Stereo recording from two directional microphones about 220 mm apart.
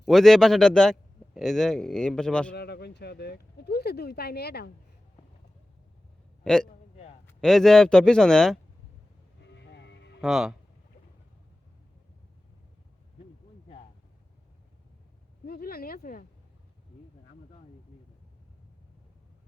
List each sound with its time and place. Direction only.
0.0 s a man's voice: centre (ahead or behind)
2.6 s speech: 45° left (ahead or behind)
6.4 s a man's voice: 5° left (ahead or behind)
6.9 s a sound: 30° left (ahead or behind)
7.3 s a man's voice: centre (ahead or behind)
9.4 s music: 50° left (ahead or behind)
10.2 s speech: centre (ahead or behind)
15.4 s a sound: 45° left (ahead or behind)